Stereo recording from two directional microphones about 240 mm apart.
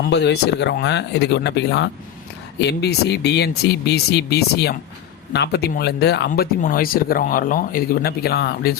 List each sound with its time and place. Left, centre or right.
0.0 s speech: left